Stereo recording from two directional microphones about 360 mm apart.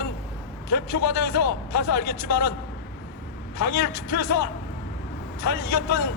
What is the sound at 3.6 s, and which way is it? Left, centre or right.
Speech, left.